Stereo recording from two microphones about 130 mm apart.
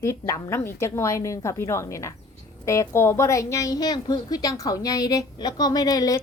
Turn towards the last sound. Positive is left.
turn(degrees=30)  # may be behind; listen again after turning